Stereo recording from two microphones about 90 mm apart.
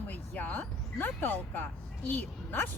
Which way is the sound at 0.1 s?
20° left (ahead or behind).